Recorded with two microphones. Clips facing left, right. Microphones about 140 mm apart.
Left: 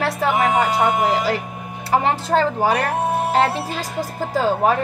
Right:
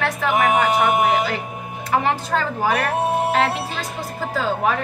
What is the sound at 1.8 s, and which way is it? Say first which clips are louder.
A woman's voice: left 2 dB; 30° left (ahead or behind).